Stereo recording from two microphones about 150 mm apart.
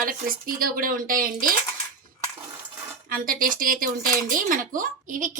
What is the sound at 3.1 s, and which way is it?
Speech, 70° right (ahead or behind).